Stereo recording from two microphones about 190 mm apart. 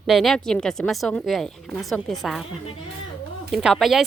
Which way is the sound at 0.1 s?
Centre (ahead or behind).